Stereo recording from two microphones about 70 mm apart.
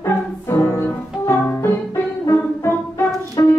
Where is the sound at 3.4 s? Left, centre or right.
Left.